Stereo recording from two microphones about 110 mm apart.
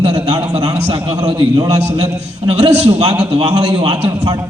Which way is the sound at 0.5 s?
40° right (ahead or behind).